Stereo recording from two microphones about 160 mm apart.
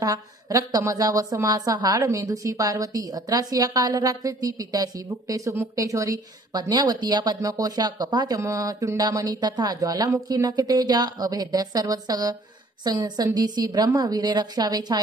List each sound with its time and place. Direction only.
0.0 s a woman's voice: 20° right (ahead or behind)